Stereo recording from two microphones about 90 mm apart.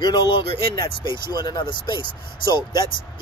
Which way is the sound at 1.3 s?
50° left (ahead or behind).